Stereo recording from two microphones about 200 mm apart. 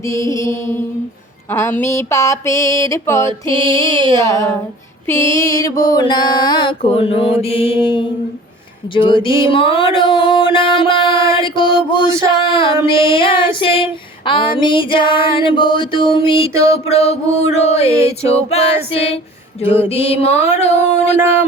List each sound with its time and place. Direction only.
0.1 s a sound: 15° left (ahead or behind)
5.9 s child singing: 20° left (ahead or behind)
16.7 s music: 30° left (ahead or behind)